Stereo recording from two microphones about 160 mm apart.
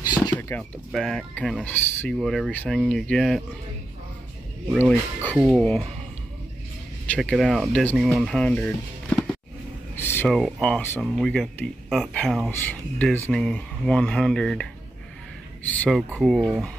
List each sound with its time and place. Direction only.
0.4 s a sound: 15° left (ahead or behind)
0.9 s speech: 5° left (ahead or behind)
2.1 s speech: centre (ahead or behind)
4.7 s speech: 10° left (ahead or behind)
7.1 s speech: 5° left (ahead or behind)
9.9 s a sound: 15° left (ahead or behind)
10.2 s speech: centre (ahead or behind)
16.2 s speech: centre (ahead or behind)